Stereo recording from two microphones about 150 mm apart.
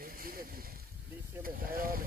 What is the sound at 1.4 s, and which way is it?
Vehicle, 75° right (ahead or behind).